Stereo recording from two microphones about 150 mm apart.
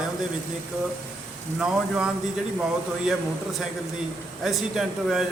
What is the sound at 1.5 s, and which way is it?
Speech, 5° right (ahead or behind).